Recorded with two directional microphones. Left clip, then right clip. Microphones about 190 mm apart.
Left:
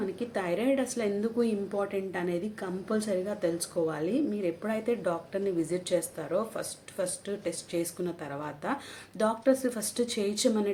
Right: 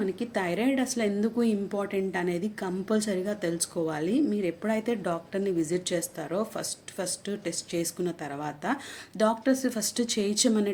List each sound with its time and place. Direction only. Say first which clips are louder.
0.0 s a woman's voice: right 3 dB; 35° right (ahead or behind)